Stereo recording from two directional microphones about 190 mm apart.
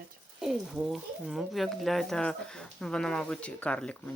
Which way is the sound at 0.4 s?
Centre (ahead or behind).